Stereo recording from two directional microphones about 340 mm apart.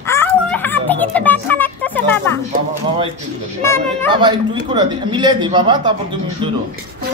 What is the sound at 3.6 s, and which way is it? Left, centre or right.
Speech, centre.